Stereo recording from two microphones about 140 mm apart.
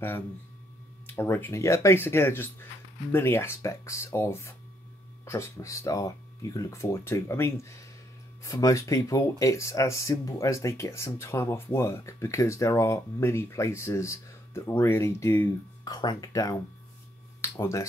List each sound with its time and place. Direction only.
1.0 s speech: 15° left (ahead or behind)